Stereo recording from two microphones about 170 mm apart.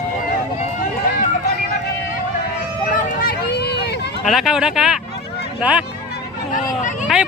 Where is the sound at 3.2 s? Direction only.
70° left (ahead or behind).